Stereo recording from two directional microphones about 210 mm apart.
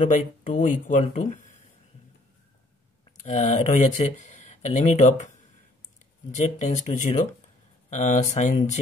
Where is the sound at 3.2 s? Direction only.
35° left (ahead or behind).